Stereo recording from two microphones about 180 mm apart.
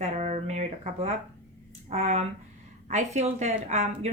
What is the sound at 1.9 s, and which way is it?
A woman's voice, 35° right (ahead or behind).